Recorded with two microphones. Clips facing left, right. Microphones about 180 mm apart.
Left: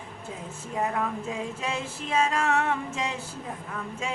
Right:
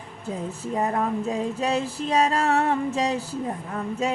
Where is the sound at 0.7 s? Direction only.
35° right (ahead or behind).